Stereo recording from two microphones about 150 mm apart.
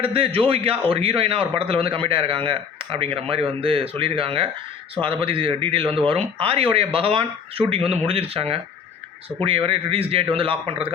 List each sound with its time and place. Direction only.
0.0 s a man's voice: 40° right (ahead or behind)